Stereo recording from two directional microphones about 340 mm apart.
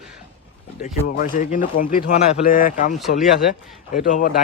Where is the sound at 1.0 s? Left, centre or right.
Left.